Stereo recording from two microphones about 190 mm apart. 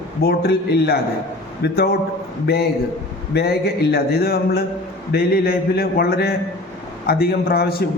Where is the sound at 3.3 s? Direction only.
55° left (ahead or behind).